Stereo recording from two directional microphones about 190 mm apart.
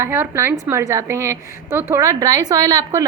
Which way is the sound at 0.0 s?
10° right (ahead or behind).